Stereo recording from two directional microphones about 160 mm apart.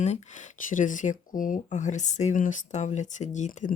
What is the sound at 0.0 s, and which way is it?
Speech, 45° left (ahead or behind).